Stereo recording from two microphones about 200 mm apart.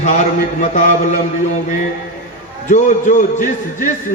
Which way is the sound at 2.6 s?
40° left (ahead or behind).